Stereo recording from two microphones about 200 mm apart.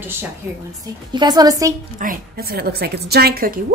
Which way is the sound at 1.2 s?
20° right (ahead or behind).